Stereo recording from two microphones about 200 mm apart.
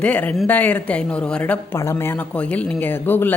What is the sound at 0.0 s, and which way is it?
A man's voice, 5° left (ahead or behind).